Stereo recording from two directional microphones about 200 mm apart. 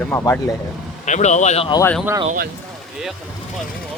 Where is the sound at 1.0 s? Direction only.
35° left (ahead or behind).